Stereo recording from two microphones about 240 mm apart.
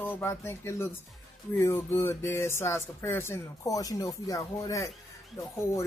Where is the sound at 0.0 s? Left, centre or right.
Centre.